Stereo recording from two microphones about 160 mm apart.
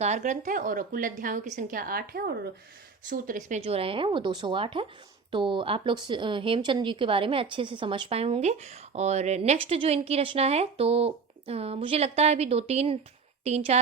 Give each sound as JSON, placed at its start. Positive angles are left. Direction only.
{"t": 0.0, "sound": "a woman's voice", "side_deg": -50}
{"t": 3.1, "sound": "speech", "side_deg": -55}
{"t": 3.6, "sound": "speech", "side_deg": -35}